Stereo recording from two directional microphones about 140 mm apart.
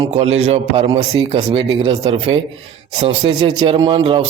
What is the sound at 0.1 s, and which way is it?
A man's voice, 50° right (ahead or behind).